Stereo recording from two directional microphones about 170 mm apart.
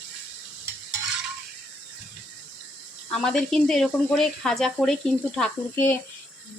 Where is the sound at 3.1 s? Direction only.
5° left (ahead or behind).